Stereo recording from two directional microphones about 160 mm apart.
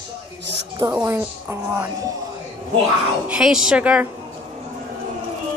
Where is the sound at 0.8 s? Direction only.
20° right (ahead or behind).